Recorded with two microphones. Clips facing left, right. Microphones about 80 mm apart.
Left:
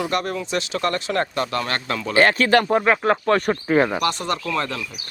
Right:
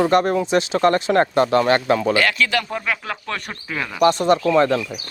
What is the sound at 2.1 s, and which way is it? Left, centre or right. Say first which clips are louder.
Speech: left 3 dB; left.